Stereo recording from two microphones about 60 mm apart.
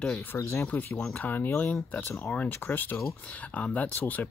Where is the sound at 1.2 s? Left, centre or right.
Left.